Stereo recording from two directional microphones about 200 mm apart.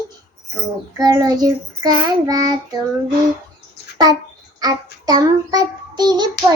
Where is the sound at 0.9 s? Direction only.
20° right (ahead or behind).